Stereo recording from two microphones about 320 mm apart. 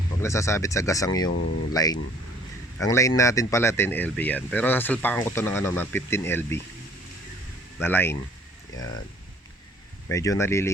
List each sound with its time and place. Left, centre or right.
0.2 s speech: centre
1.3 s speech: left
1.7 s speech: centre
7.8 s speech: centre
10.1 s speech: centre